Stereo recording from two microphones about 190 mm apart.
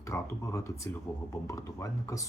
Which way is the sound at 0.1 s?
15° left (ahead or behind).